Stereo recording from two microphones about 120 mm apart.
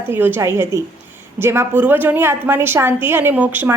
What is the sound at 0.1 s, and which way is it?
A woman's voice, 15° right (ahead or behind).